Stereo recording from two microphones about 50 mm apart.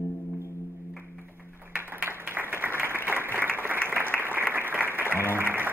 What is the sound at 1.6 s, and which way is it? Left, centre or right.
Applause, right.